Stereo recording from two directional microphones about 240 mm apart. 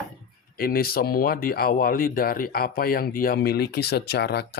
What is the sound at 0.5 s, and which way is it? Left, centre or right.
Speech, left.